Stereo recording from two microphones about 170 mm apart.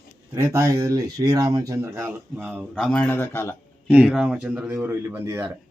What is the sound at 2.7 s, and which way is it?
Speech, 5° left (ahead or behind).